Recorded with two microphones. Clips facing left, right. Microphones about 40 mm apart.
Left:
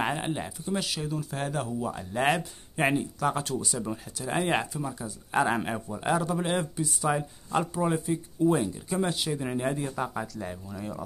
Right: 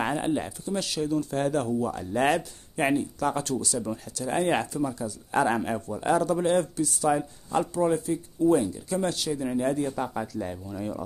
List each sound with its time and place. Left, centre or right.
0.0 s speech: centre
9.9 s speech: centre